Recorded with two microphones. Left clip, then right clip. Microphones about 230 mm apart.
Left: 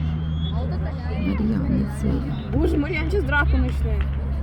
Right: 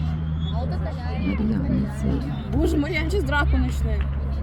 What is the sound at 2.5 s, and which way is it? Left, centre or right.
Speech, right.